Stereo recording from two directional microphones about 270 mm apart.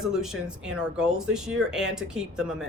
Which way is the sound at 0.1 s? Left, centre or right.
Centre.